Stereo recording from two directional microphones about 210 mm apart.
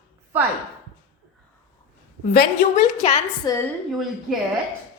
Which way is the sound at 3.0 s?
30° left (ahead or behind).